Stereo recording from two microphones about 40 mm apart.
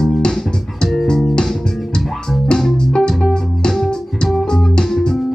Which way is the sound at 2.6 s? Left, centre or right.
Centre.